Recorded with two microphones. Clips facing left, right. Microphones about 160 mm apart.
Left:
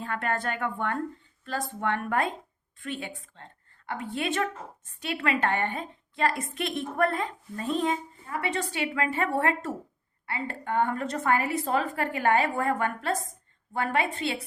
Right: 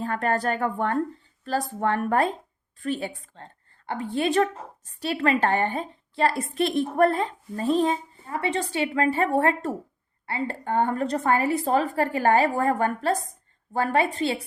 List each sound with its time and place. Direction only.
0.0 s a woman's voice: 35° right (ahead or behind)